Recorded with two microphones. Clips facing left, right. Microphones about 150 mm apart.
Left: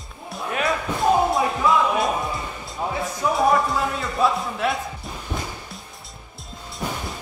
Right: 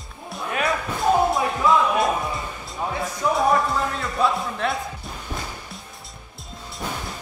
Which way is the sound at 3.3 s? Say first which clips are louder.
Left 1 dB; centre (ahead or behind).